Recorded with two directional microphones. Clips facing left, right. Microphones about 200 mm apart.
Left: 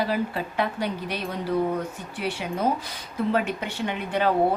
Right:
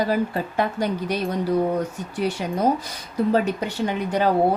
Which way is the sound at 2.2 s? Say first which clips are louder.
Right 4 dB; 40° right (ahead or behind).